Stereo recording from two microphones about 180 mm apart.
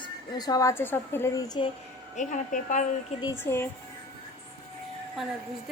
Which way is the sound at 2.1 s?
45° left (ahead or behind).